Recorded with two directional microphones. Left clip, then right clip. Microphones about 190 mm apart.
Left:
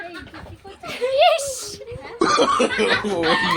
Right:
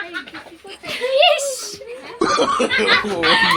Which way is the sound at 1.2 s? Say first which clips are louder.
Right 2 dB; 50° left (ahead or behind).